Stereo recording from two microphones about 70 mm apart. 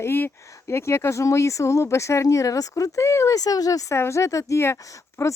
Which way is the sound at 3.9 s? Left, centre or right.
Left.